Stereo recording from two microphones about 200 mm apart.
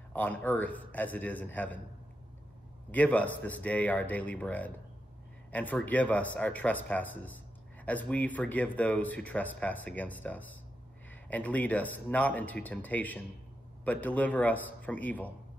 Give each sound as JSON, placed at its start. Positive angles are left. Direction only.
{"t": 0.1, "sound": "speech", "side_deg": 10}
{"t": 2.9, "sound": "speech", "side_deg": 10}